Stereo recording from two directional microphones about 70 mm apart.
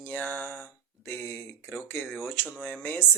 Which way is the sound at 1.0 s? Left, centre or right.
Left.